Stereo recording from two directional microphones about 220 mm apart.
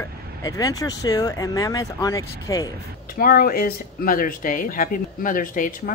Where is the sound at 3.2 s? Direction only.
40° left (ahead or behind).